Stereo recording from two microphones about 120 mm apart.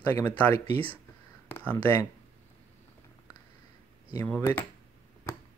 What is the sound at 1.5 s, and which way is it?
Speech, 15° left (ahead or behind).